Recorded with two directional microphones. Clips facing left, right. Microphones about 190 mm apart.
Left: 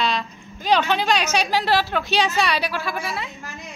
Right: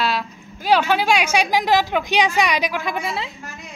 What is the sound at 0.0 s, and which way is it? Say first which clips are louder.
A woman's voice: right 1 dB; 5° right (ahead or behind).